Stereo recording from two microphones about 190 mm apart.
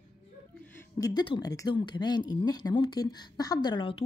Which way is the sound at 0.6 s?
10° left (ahead or behind).